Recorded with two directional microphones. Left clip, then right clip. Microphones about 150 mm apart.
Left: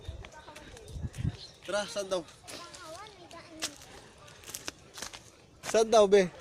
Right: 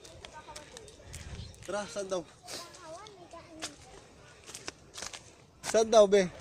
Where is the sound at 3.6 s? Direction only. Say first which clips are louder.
Left 4 dB; 45° left (ahead or behind).